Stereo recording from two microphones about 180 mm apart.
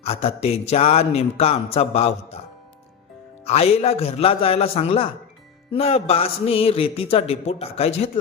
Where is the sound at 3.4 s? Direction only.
35° left (ahead or behind).